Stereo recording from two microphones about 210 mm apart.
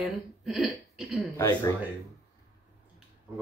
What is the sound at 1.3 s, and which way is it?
Speech, 15° left (ahead or behind).